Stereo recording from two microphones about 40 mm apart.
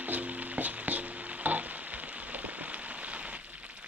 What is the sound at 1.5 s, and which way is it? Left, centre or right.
Frying, right.